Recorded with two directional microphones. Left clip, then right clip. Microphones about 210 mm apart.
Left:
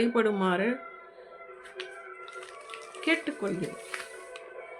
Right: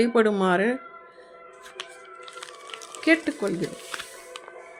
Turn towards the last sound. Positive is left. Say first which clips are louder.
# right 5 dB
turn(degrees=-30)  # may be behind; listen again after turning